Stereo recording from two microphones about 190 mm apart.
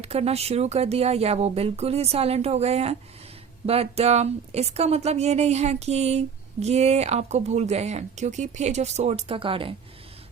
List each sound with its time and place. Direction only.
0.0 s speech: 35° right (ahead or behind)